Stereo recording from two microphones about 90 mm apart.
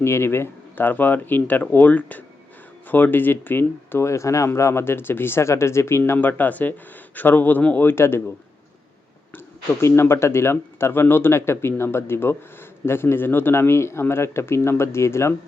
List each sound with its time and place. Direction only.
0.0 s speech: 30° left (ahead or behind)
9.8 s speech: 30° left (ahead or behind)